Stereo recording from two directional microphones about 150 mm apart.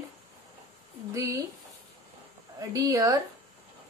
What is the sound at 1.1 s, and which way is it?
Speech, 20° right (ahead or behind).